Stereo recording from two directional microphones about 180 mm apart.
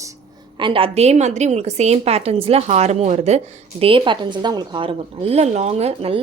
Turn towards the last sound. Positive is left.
turn(degrees=-35)  # may be behind; listen again after turning